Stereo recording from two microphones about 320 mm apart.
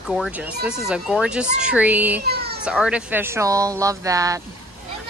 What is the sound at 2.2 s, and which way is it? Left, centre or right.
Speech, right.